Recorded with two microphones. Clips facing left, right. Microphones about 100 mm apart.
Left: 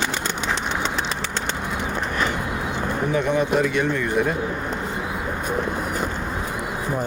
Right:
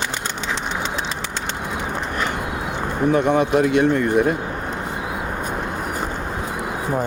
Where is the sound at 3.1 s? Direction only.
65° right (ahead or behind).